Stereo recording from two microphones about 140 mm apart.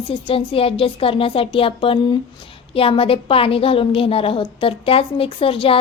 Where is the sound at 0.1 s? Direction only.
40° left (ahead or behind).